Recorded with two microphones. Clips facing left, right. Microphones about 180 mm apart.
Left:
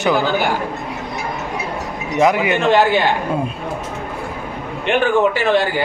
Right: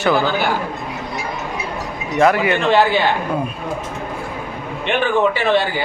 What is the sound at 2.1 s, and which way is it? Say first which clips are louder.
Speech: even; 15° left (ahead or behind).